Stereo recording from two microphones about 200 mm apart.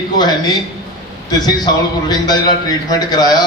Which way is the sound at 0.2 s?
20° left (ahead or behind).